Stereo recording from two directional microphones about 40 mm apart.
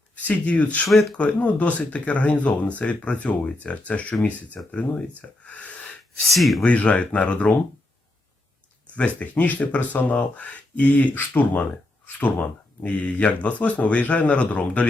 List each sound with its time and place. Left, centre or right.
0.2 s speech: left
0.9 s speech: centre
1.1 s speech: left
6.2 s speech: centre
6.6 s speech: left
9.0 s speech: left
12.2 s speech: left